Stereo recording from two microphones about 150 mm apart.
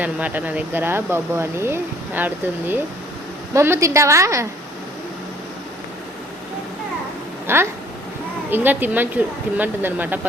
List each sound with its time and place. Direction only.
0.0 s a woman's voice: 10° right (ahead or behind)
7.4 s speech: 15° right (ahead or behind)